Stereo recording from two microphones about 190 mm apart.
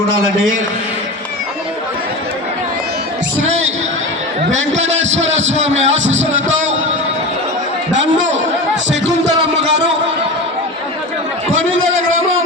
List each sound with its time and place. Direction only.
0.2 s a man's voice: 90° right
4.5 s speech: 80° right